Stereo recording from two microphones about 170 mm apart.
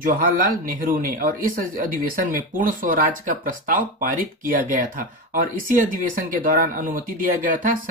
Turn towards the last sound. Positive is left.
turn(degrees=-50)  # may be behind; listen again after turning